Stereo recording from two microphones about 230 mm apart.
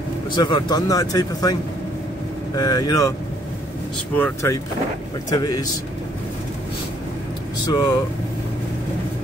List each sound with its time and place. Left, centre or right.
0.4 s speech: centre
4.2 s speech: centre
7.6 s speech: centre